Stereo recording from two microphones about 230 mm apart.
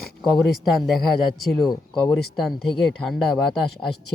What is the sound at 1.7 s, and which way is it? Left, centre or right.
Speech, centre.